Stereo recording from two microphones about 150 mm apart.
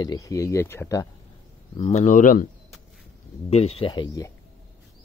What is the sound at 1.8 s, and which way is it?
Speech, 50° left (ahead or behind).